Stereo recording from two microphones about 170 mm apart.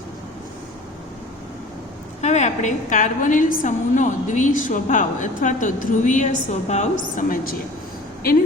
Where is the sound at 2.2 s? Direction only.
40° left (ahead or behind).